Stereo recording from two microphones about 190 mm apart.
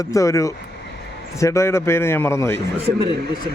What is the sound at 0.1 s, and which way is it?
Speech, 15° left (ahead or behind).